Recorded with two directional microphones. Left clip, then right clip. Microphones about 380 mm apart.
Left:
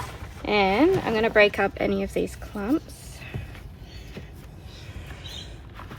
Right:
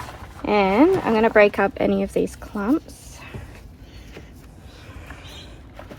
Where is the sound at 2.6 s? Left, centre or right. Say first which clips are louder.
Right 4 dB; centre.